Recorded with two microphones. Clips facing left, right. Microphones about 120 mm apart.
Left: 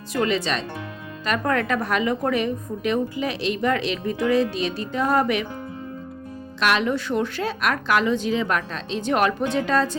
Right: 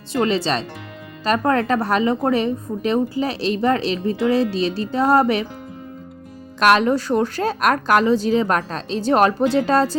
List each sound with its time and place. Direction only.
0.1 s speech: 30° right (ahead or behind)
6.6 s speech: 45° right (ahead or behind)